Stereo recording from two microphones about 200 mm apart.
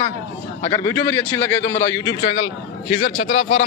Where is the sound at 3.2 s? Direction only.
50° left (ahead or behind).